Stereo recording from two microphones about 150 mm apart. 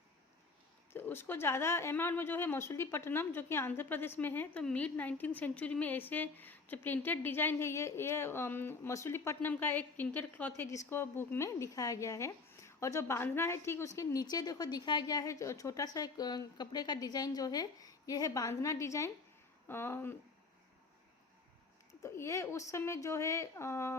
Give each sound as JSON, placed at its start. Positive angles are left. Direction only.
{"t": 0.9, "sound": "a woman's voice", "side_deg": 15}
{"t": 22.0, "sound": "a woman's voice", "side_deg": 20}